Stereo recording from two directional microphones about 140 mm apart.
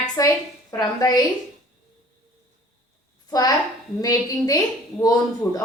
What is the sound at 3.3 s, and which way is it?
A woman's voice, 25° left (ahead or behind).